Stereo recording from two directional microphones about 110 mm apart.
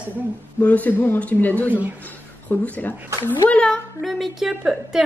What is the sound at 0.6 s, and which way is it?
A woman's voice, 15° left (ahead or behind).